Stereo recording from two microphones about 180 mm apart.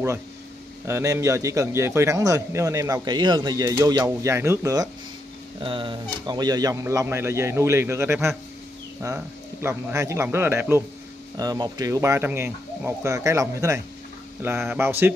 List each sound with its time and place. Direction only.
0.8 s a man's voice: 15° right (ahead or behind)
5.6 s a man's voice: 25° right (ahead or behind); by 15.1 s 10° right (ahead or behind)